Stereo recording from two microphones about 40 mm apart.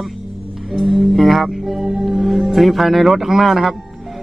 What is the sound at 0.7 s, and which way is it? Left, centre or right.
Speech, centre.